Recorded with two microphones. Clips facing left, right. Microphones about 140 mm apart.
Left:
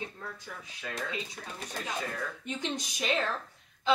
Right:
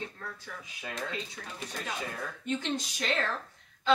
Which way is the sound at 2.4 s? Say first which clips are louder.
Right 6 dB; 15° left (ahead or behind).